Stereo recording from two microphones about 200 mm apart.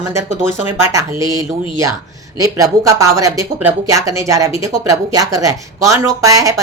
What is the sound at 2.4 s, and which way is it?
Speech, 15° right (ahead or behind).